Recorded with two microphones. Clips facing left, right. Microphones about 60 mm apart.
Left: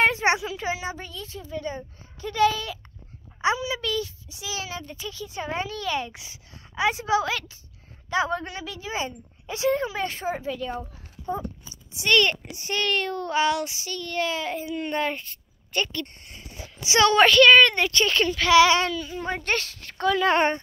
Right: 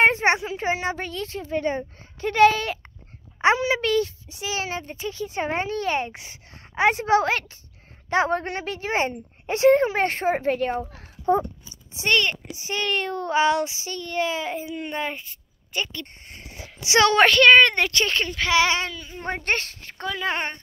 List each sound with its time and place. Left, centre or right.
0.0 s a sound: right
0.7 s a woman's voice: right
11.9 s a child's voice: right
12.2 s a child's voice: centre
16.9 s a woman's voice: right
17.2 s speech: right
18.1 s a child's voice: right
19.8 s speech: right
20.1 s speech: centre